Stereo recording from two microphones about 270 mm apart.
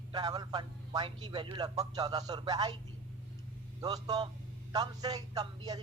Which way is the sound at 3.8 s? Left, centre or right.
Centre.